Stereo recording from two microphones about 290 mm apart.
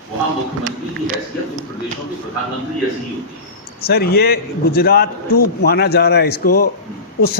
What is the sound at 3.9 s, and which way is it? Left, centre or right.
A man's voice, left.